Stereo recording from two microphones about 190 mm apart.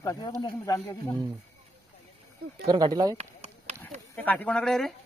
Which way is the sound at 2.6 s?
25° right (ahead or behind).